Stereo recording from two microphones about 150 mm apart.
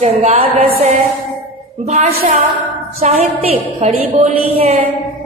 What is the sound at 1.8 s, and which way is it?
A woman's voice, 50° right (ahead or behind).